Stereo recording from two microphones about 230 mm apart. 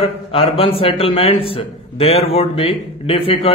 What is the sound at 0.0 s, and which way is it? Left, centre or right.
A man's voice, left.